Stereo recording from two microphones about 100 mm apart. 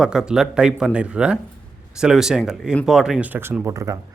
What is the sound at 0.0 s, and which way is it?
Speech, 5° right (ahead or behind).